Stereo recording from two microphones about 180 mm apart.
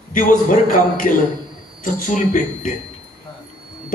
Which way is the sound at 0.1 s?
45° left (ahead or behind).